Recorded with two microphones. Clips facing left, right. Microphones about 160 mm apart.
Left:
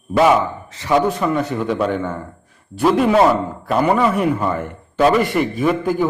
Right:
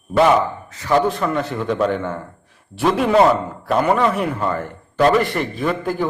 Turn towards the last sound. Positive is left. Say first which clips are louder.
# left 4 dB
turn(degrees=5)  # may be behind; listen again after turning